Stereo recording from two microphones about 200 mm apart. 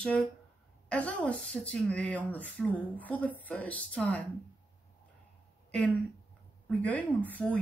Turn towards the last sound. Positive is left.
turn(degrees=5)  # may be behind; listen again after turning